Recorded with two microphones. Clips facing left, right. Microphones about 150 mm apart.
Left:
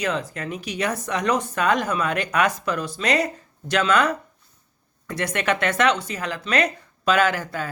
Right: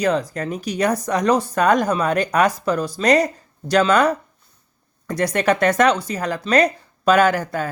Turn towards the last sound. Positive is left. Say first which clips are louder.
# right 5 dB
turn(degrees=-45)  # may be behind; listen again after turning